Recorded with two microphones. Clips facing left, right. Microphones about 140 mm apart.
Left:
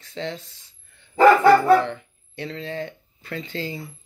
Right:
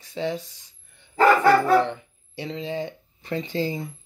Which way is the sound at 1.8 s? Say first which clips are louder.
Right 2 dB; 15° right (ahead or behind).